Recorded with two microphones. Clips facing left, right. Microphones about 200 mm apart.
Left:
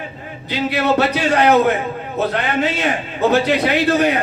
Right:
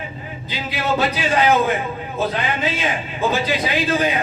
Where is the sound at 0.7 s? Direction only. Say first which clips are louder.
Left 3 dB; 70° left (ahead or behind).